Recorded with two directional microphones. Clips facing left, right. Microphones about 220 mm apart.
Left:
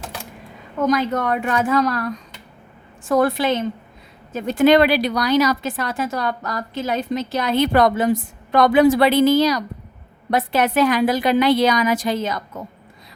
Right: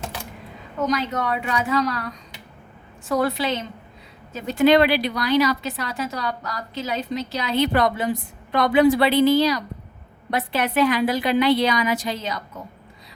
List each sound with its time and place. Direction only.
0.9 s a woman's voice: 50° left (ahead or behind)
3.1 s a woman's voice: 50° left (ahead or behind)